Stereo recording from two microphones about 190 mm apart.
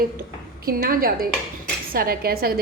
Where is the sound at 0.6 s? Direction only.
50° right (ahead or behind).